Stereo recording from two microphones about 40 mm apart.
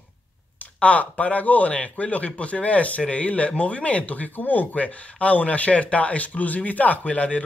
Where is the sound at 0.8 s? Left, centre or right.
Left.